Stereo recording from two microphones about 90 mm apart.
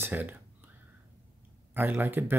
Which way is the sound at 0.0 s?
20° right (ahead or behind).